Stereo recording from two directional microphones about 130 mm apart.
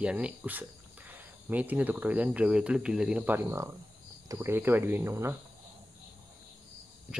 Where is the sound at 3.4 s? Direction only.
25° right (ahead or behind).